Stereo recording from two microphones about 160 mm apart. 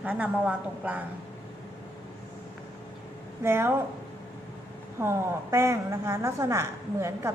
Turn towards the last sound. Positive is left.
turn(degrees=-15)  # may be behind; listen again after turning